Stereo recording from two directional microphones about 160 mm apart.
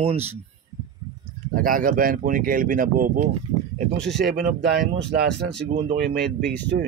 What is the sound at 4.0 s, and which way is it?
Speech, 90° right.